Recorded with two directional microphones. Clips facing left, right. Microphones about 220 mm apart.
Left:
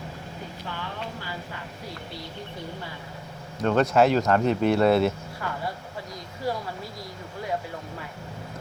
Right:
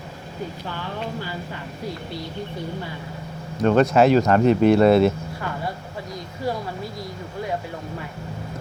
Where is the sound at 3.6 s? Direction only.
15° right (ahead or behind).